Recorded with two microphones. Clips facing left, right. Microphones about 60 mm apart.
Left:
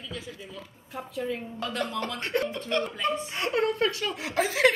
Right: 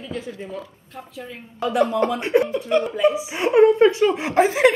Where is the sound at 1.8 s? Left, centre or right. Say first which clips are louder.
Right 12 dB; right.